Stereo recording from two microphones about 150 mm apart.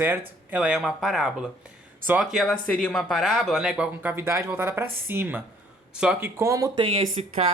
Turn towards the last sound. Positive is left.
turn(degrees=-40)  # may be behind; listen again after turning